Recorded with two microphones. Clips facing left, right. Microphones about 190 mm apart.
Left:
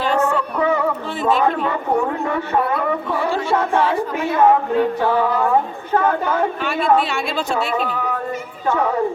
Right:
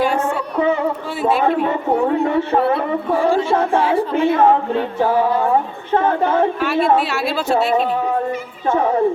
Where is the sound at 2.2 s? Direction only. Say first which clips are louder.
Right 4 dB; 30° right (ahead or behind).